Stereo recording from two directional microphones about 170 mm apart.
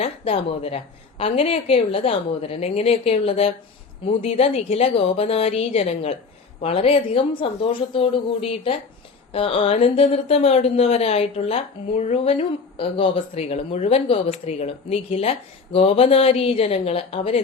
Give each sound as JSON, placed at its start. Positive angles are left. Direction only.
{"t": 0.0, "sound": "speech", "side_deg": 35}